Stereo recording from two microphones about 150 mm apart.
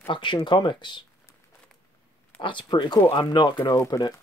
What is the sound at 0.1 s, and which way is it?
Speech, 35° left (ahead or behind).